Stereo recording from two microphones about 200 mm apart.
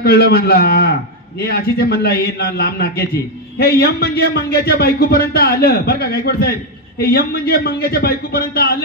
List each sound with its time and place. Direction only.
0.0 s a man's voice: 50° left (ahead or behind)